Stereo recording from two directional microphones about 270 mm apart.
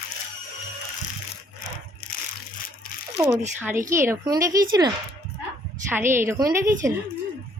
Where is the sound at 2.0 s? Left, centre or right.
Left.